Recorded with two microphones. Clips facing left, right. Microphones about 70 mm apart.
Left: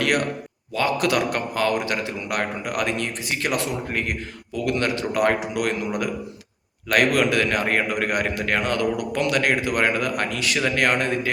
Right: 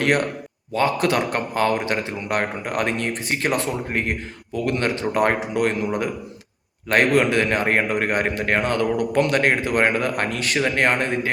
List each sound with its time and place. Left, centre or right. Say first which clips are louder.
0.7 s a man's voice: right 2 dB; right